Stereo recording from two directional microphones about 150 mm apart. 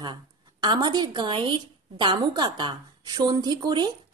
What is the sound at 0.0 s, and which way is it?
Speech, 30° right (ahead or behind).